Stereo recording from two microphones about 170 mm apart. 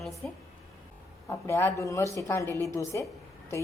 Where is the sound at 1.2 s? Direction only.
15° left (ahead or behind).